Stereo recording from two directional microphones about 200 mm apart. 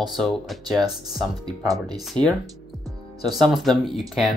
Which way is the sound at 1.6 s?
20° right (ahead or behind).